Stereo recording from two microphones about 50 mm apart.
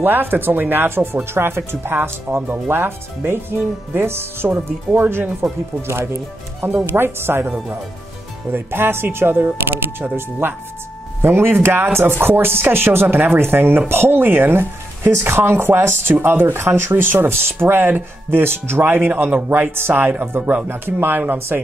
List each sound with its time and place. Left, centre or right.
0.0 s speech: right
2.0 s speech: right
4.5 s speech: right
8.5 s speech: right
20.7 s speech: right